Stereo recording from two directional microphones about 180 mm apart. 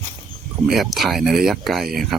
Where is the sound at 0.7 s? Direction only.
Centre (ahead or behind).